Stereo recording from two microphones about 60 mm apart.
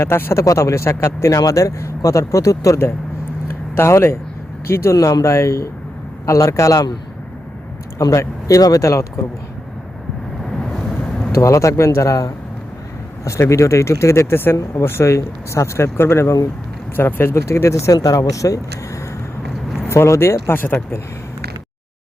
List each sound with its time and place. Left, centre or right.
0.0 s speech: left
0.4 s speech: left
3.8 s speech: left
4.9 s speech: left
7.9 s speech: left
11.3 s speech: left
14.3 s speech: left
17.9 s speech: left
19.9 s speech: left